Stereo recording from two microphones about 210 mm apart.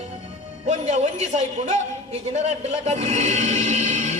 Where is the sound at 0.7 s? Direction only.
30° right (ahead or behind).